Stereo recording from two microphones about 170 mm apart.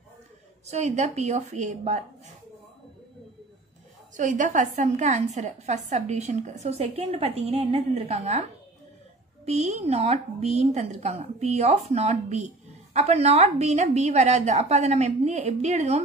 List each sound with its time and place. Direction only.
0.7 s a woman's voice: 40° right (ahead or behind)
4.2 s a woman's voice: 50° right (ahead or behind)
9.5 s a woman's voice: 40° right (ahead or behind)